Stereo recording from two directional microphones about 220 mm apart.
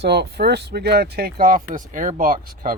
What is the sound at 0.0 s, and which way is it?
Speech, 50° right (ahead or behind).